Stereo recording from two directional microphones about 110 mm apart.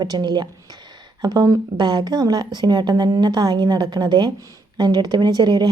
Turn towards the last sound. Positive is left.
turn(degrees=-40)  # may be behind; listen again after turning